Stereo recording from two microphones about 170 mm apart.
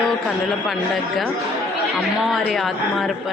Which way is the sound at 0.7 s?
Centre (ahead or behind).